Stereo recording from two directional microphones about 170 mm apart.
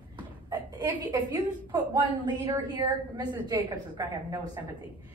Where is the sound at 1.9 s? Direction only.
25° right (ahead or behind).